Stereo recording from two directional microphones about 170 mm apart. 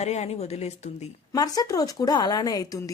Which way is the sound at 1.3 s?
20° left (ahead or behind).